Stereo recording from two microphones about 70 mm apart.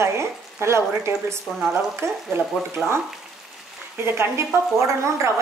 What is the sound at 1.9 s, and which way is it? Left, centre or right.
Speech, right.